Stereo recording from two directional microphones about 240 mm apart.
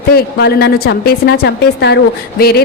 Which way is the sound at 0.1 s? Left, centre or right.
Left.